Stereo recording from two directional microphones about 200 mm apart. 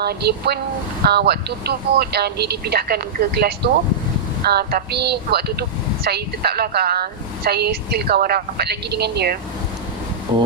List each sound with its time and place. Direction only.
0.0 s a woman's voice: 55° right (ahead or behind)
10.3 s speech: 20° right (ahead or behind)